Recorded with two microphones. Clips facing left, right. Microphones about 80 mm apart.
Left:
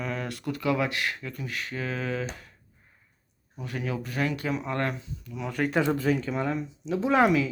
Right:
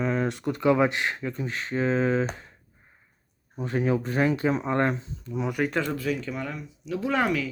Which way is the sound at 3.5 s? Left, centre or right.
Right.